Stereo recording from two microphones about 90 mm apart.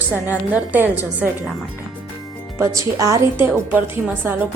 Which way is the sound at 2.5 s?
35° right (ahead or behind).